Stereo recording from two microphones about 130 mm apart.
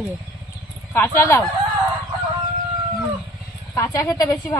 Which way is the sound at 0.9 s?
20° left (ahead or behind).